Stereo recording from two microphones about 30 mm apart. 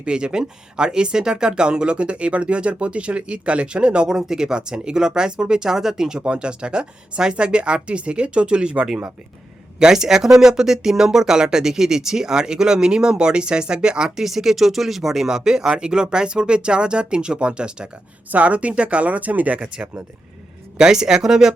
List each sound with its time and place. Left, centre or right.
0.0 s speech: right
4.1 s speech: centre
5.7 s speech: centre
6.2 s speech: right
9.8 s speech: centre
14.2 s speech: centre
15.7 s speech: right
18.3 s speech: right
19.0 s speech: right
19.6 s speech: right
20.7 s speech: right